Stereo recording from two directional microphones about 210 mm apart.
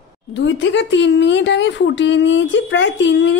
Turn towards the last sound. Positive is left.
turn(degrees=60)  # may be behind; listen again after turning